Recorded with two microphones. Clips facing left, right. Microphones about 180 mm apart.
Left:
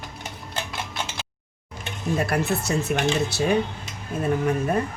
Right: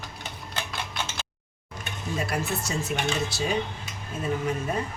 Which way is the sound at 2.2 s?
60° left (ahead or behind).